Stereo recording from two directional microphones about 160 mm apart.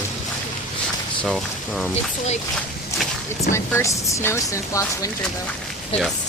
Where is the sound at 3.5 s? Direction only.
20° left (ahead or behind).